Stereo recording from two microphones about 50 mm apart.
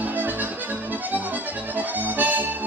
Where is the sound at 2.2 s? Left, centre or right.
Right.